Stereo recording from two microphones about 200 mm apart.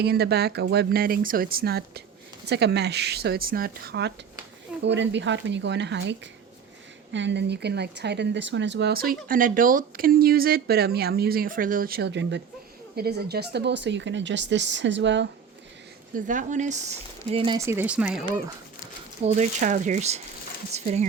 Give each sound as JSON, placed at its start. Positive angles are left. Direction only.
{"t": 0.0, "sound": "speech", "side_deg": -50}
{"t": 16.1, "sound": "speech", "side_deg": -40}
{"t": 17.2, "sound": "speech", "side_deg": -25}
{"t": 17.7, "sound": "speech", "side_deg": -10}
{"t": 19.2, "sound": "speech", "side_deg": -35}